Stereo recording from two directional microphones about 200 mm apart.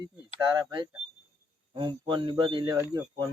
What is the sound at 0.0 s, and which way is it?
Speech, 20° right (ahead or behind).